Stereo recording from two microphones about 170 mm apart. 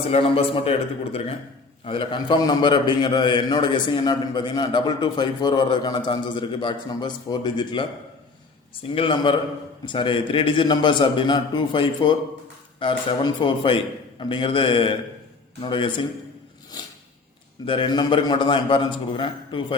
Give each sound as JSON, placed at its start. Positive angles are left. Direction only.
{"t": 0.1, "sound": "a man's voice", "side_deg": 35}
{"t": 9.0, "sound": "a man's voice", "side_deg": 30}
{"t": 17.7, "sound": "a man's voice", "side_deg": 30}